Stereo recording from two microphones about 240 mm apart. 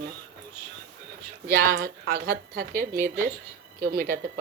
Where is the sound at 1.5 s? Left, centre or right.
Right.